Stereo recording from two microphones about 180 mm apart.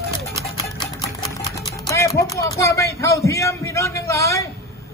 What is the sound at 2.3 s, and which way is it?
A man's voice, 15° left (ahead or behind).